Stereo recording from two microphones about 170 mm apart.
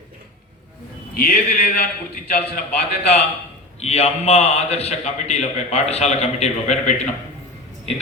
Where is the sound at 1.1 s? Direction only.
65° left (ahead or behind).